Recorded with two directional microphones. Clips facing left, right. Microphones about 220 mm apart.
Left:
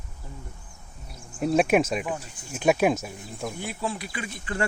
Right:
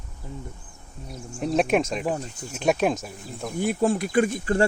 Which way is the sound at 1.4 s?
5° left (ahead or behind).